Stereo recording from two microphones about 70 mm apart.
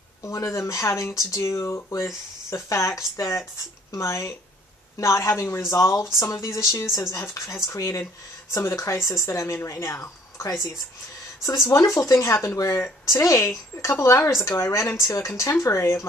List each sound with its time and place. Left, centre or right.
0.2 s speech: left